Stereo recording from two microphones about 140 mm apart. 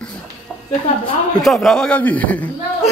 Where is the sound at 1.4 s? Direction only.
Centre (ahead or behind).